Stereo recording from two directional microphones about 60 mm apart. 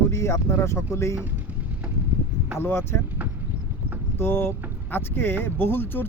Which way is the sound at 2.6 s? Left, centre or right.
Left.